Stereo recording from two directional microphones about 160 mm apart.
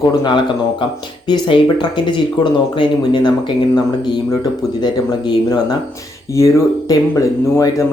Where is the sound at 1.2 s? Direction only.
30° left (ahead or behind).